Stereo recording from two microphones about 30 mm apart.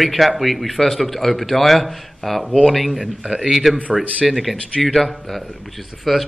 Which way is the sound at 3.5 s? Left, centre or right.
Centre.